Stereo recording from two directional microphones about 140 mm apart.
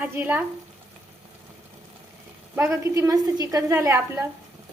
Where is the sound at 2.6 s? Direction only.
20° right (ahead or behind).